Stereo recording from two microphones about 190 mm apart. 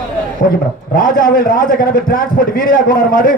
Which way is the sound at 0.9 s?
50° left (ahead or behind).